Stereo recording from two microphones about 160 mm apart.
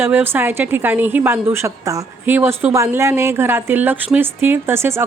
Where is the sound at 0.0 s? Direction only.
15° right (ahead or behind).